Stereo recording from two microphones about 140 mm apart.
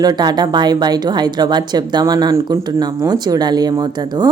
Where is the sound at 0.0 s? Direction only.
30° right (ahead or behind).